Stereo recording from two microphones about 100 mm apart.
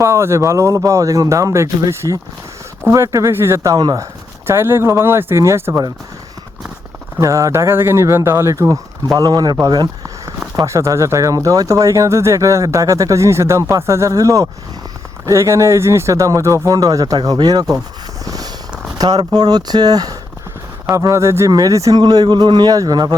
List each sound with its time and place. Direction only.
0.0 s speech: 30° right (ahead or behind)
4.4 s speech: 25° right (ahead or behind)
7.2 s speech: 30° right (ahead or behind)
10.5 s speech: 35° right (ahead or behind)
18.3 s a sound: 40° right (ahead or behind)
18.9 s speech: 40° right (ahead or behind)